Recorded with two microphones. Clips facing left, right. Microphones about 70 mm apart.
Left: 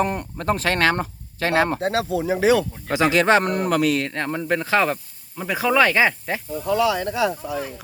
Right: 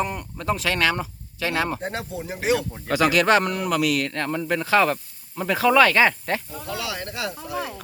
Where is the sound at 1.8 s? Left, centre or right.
Left.